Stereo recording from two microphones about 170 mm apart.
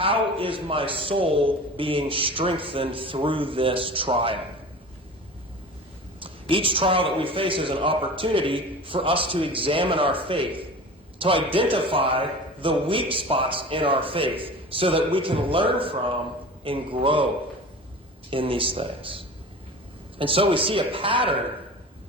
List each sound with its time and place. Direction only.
0.0 s a man's voice: 30° right (ahead or behind)
6.1 s a man's voice: 30° right (ahead or behind)
18.3 s a man's voice: 30° right (ahead or behind)